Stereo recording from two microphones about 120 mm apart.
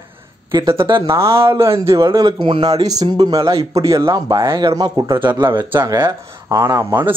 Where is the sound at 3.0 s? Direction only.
60° right (ahead or behind).